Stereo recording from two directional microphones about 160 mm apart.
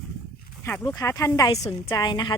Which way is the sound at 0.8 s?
20° left (ahead or behind).